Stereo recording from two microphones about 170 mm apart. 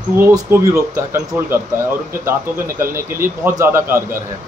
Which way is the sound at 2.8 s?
15° right (ahead or behind).